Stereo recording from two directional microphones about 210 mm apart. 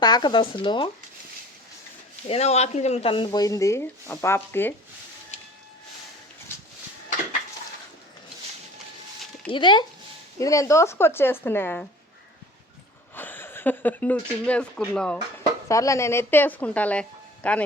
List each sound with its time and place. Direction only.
0.0 s speech: 20° left (ahead or behind)
2.2 s speech: 30° left (ahead or behind); by 4.7 s 10° left (ahead or behind)
9.5 s speech: 20° left (ahead or behind)
13.1 s speech: 10° left (ahead or behind)